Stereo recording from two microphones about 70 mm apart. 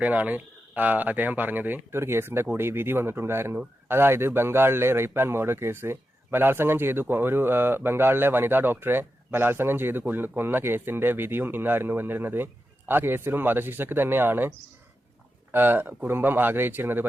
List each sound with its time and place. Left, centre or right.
0.0 s a man's voice: right
15.5 s speech: right